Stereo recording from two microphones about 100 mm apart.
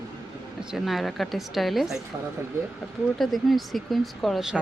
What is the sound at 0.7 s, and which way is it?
Speech, centre (ahead or behind).